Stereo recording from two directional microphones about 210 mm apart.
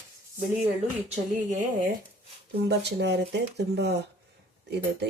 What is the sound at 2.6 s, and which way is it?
Speech, 55° right (ahead or behind).